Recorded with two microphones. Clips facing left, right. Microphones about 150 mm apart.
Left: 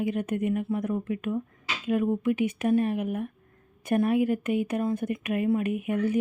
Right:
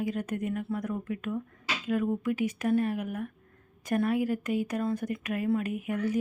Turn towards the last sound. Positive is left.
turn(degrees=20)  # may be behind; listen again after turning